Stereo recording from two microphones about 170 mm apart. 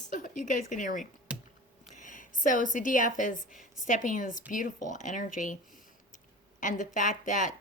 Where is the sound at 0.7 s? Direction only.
50° left (ahead or behind).